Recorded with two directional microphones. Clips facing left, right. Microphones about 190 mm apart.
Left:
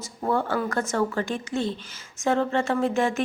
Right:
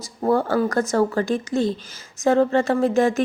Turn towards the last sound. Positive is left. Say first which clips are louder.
# right 5 dB
turn(degrees=-40)  # may be behind; listen again after turning